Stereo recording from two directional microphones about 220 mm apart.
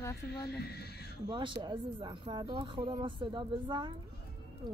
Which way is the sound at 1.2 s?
20° right (ahead or behind).